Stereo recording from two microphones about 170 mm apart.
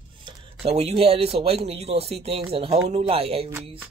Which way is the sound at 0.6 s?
35° right (ahead or behind).